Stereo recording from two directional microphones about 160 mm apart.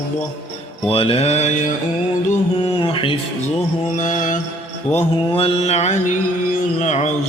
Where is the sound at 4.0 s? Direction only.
55° left (ahead or behind).